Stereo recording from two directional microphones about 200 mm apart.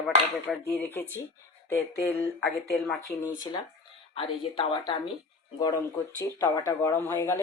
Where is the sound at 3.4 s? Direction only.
20° left (ahead or behind).